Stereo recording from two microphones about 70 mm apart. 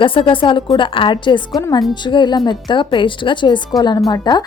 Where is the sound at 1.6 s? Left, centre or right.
Left.